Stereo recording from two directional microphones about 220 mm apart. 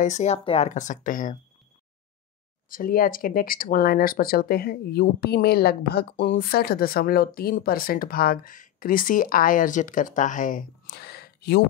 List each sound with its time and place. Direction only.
0.0 s speech: 30° left (ahead or behind)
2.7 s speech: 40° left (ahead or behind)